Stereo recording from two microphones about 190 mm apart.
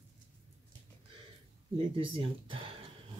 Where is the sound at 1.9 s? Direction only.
25° right (ahead or behind).